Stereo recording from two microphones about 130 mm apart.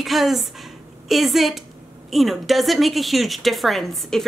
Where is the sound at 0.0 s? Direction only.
Centre (ahead or behind).